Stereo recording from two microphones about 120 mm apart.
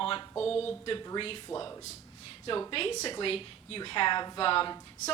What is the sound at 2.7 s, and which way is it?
A woman's voice, 50° left (ahead or behind).